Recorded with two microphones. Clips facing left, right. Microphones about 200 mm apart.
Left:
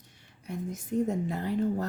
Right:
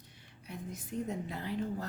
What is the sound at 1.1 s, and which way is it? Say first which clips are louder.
Speech: left 7 dB; 45° left (ahead or behind).